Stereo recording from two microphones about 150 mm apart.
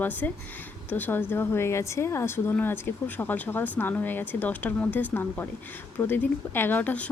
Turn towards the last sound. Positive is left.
turn(degrees=10)  # may be behind; listen again after turning